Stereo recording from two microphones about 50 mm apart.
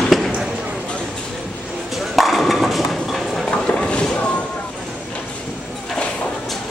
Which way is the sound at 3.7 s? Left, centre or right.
Left.